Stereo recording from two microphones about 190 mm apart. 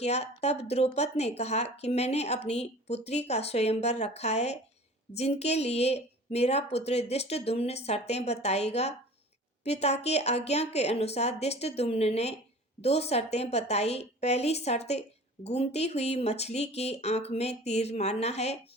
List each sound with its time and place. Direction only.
0.0 s speech: 35° left (ahead or behind)